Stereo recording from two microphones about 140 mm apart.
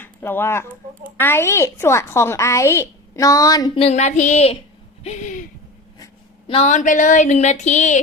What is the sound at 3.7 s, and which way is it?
A woman's voice, 50° left (ahead or behind).